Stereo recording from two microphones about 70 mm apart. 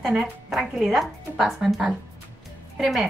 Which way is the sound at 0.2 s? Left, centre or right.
Centre.